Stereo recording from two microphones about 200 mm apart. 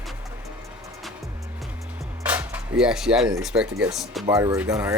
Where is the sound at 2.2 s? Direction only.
10° right (ahead or behind).